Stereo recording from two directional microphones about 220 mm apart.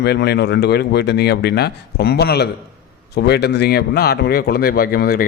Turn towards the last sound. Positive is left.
turn(degrees=45)  # may be behind; listen again after turning